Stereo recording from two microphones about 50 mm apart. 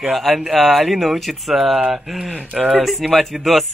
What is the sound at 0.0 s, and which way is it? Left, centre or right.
Speech, centre.